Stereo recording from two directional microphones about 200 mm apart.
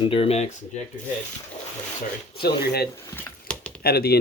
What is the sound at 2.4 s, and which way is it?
Speech, 55° left (ahead or behind).